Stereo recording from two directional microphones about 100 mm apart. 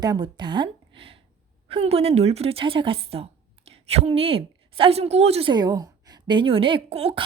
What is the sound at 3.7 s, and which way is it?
A woman's voice, 90° right.